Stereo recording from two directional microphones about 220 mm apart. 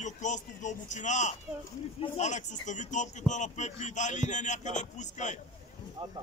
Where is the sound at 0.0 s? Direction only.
35° left (ahead or behind).